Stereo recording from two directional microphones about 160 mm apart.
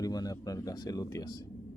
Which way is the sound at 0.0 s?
25° left (ahead or behind).